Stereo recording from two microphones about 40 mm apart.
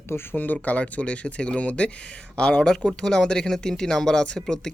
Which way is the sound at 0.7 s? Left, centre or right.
Left.